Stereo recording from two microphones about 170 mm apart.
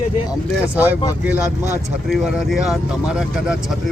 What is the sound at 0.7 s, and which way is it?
Speech, 10° right (ahead or behind).